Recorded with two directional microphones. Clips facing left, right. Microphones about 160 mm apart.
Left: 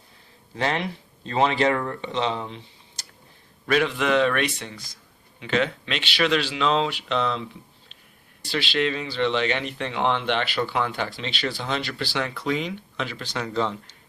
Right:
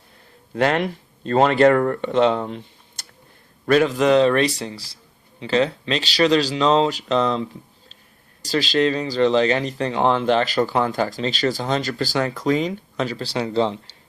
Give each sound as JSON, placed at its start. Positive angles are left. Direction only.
{"t": 0.5, "sound": "speech", "side_deg": -55}
{"t": 3.7, "sound": "speech", "side_deg": -40}
{"t": 8.4, "sound": "speech", "side_deg": -40}